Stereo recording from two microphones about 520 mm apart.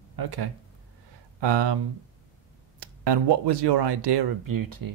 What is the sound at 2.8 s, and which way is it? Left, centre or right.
Speech, right.